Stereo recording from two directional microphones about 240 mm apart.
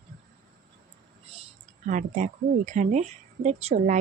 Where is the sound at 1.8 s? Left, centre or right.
Right.